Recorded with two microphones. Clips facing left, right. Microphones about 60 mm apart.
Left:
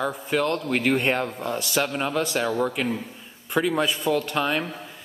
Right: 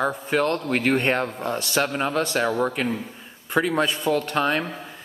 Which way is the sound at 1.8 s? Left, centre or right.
Centre.